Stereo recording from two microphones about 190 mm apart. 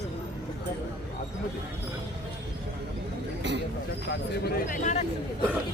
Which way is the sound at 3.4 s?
65° right (ahead or behind).